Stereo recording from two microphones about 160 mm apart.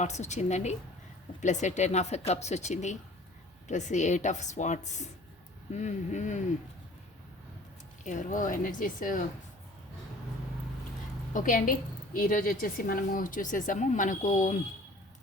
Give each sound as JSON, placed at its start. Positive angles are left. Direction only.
{"t": 0.0, "sound": "speech", "side_deg": 45}
{"t": 8.0, "sound": "a woman's voice", "side_deg": 55}
{"t": 11.3, "sound": "a woman's voice", "side_deg": 55}